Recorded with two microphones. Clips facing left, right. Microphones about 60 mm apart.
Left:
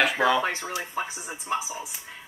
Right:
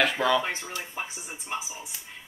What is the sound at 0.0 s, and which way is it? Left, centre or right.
Speech, centre.